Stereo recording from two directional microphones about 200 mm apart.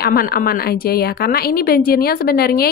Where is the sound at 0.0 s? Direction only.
50° left (ahead or behind).